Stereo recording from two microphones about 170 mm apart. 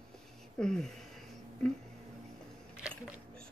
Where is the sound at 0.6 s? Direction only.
5° left (ahead or behind).